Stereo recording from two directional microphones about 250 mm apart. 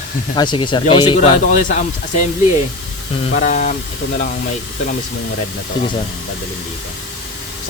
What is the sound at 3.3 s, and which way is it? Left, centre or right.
Speech, left.